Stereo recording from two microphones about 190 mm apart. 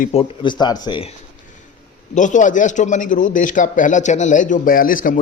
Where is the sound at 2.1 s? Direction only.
40° left (ahead or behind).